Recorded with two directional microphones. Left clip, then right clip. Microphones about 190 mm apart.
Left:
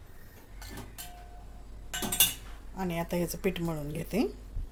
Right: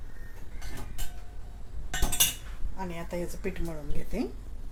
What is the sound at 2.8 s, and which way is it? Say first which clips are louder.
A woman's voice: left 3 dB; 60° left (ahead or behind).